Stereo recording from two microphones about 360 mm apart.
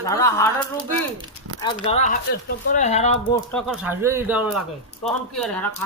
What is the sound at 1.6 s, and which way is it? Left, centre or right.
Speech, centre.